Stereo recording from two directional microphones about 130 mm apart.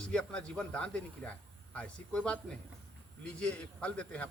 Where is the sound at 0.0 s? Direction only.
5° left (ahead or behind).